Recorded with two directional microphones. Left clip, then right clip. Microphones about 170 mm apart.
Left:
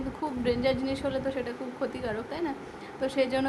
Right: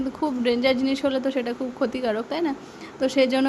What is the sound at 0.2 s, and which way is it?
Speech, 40° right (ahead or behind).